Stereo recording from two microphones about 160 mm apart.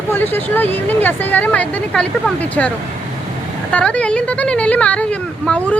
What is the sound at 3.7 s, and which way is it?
Speech, 5° left (ahead or behind).